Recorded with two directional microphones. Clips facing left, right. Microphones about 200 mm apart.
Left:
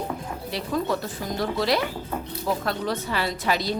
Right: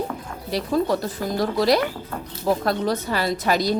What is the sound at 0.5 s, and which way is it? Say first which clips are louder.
A woman's voice: right 5 dB; 35° right (ahead or behind).